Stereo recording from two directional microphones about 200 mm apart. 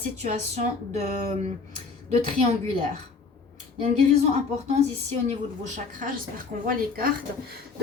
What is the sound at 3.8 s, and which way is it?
Speech, 30° right (ahead or behind).